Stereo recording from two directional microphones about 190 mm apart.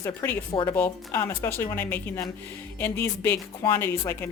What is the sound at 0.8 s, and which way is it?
Speech, 10° left (ahead or behind).